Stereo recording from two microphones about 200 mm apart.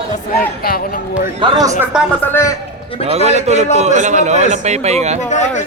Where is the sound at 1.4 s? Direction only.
20° right (ahead or behind).